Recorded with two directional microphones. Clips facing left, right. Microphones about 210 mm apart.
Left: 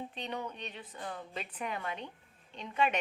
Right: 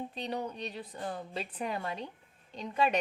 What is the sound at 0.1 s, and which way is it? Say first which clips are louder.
A woman's voice: right 3 dB; 35° right (ahead or behind).